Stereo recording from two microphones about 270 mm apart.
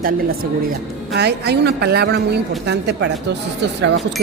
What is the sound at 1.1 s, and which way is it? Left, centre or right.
A woman's voice, right.